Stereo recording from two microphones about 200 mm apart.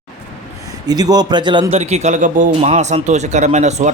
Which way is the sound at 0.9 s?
20° right (ahead or behind).